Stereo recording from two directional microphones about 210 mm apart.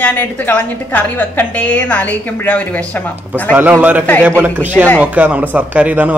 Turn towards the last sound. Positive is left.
turn(degrees=-5)  # may be behind; listen again after turning